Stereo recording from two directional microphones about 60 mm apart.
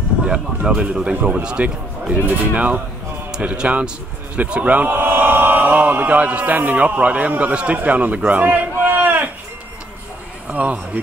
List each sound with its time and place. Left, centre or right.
0.2 s speech: centre
2.2 s a man's voice: right
10.5 s speech: right